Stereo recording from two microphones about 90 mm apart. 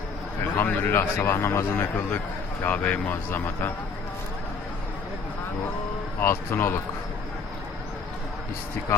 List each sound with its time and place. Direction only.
0.5 s a man's voice: 25° left (ahead or behind)
2.6 s a man's voice: 15° left (ahead or behind)
6.1 s a man's voice: 25° left (ahead or behind)